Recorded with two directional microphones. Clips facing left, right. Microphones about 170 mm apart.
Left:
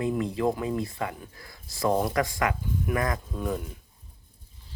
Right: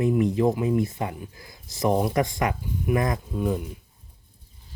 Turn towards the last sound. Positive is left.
turn(degrees=-15)  # may be behind; listen again after turning